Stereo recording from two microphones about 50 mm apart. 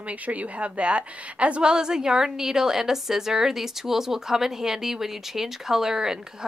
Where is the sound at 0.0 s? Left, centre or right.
Right.